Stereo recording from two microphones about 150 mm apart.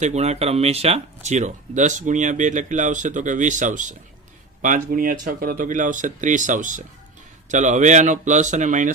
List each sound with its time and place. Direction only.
0.0 s speech: 45° right (ahead or behind)